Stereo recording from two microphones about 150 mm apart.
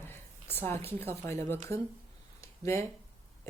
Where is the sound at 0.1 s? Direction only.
15° left (ahead or behind).